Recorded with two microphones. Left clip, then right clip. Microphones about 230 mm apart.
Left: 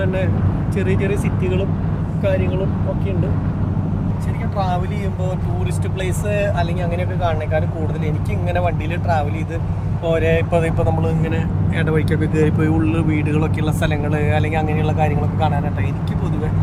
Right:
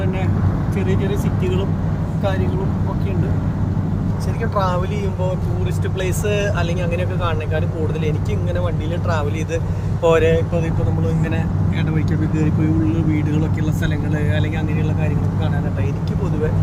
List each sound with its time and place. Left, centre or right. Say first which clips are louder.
0.8 s speech: left 3 dB; centre
6.2 s speech: left 2 dB; centre
8.5 s speech: left 6 dB; centre
10.1 s speech: right 3 dB; centre
11.8 s speech: left 6 dB; left